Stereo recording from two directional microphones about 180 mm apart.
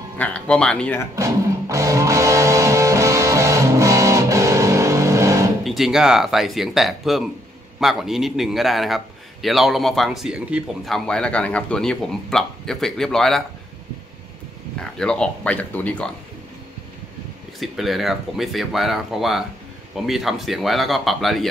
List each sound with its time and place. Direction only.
0.2 s speech: 5° left (ahead or behind)
1.1 s music: 15° right (ahead or behind)
5.6 s a man's voice: centre (ahead or behind)
14.8 s speech: 5° left (ahead or behind)
17.6 s a man's voice: centre (ahead or behind)